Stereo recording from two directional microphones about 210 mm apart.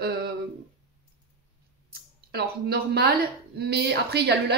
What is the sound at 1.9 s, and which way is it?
Speech, 50° right (ahead or behind).